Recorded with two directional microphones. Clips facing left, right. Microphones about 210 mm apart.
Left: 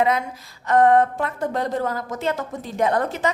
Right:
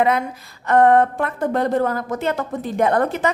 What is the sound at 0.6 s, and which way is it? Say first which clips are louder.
A woman's voice: right 2 dB; 60° right (ahead or behind).